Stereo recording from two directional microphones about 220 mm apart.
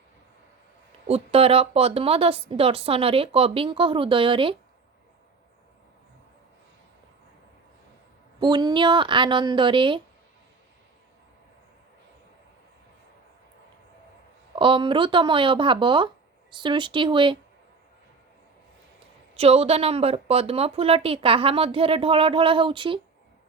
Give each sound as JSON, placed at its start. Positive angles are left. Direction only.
{"t": 1.0, "sound": "speech", "side_deg": -25}
{"t": 8.4, "sound": "speech", "side_deg": -20}
{"t": 14.5, "sound": "speech", "side_deg": -20}
{"t": 19.3, "sound": "speech", "side_deg": -25}